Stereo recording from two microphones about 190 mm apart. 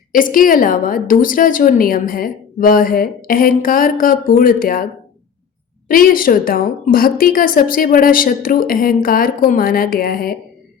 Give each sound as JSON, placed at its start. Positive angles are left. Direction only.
{"t": 0.1, "sound": "a woman's voice", "side_deg": 45}
{"t": 5.9, "sound": "a woman's voice", "side_deg": 50}